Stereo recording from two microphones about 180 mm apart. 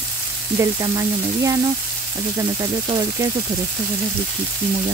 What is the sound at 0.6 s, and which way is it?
A woman's voice, 20° right (ahead or behind).